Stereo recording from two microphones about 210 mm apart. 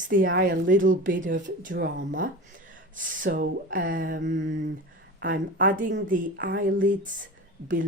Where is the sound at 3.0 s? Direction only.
40° right (ahead or behind).